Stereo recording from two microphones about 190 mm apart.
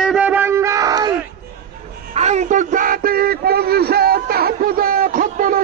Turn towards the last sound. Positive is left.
turn(degrees=-45)  # may be behind; listen again after turning